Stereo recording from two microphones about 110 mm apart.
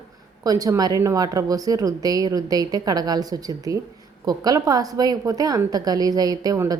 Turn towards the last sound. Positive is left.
turn(degrees=-30)  # may be behind; listen again after turning